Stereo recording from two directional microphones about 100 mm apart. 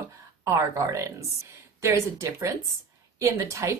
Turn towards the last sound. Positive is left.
turn(degrees=-30)  # may be behind; listen again after turning